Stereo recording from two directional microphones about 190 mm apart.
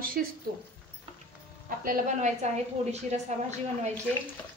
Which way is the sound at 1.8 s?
45° right (ahead or behind).